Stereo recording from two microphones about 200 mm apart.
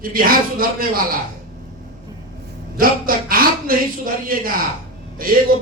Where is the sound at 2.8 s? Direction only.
45° right (ahead or behind).